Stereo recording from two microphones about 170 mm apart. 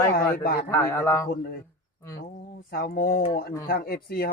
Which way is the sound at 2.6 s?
65° left (ahead or behind).